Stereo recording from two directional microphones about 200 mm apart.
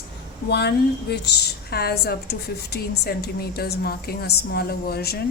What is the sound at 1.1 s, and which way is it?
A woman's voice, 55° left (ahead or behind).